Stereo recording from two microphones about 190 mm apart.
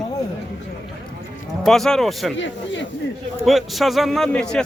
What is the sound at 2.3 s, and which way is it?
Speech, 75° left (ahead or behind).